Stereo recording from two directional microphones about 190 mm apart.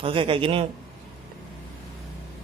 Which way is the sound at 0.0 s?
25° right (ahead or behind).